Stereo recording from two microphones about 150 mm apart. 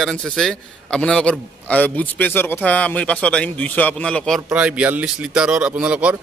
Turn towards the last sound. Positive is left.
turn(degrees=-10)  # may be behind; listen again after turning